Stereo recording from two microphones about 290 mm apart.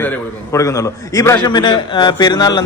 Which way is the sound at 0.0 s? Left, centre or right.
Centre.